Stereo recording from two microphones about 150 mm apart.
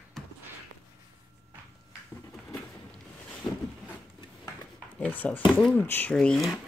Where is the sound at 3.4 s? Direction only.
25° left (ahead or behind).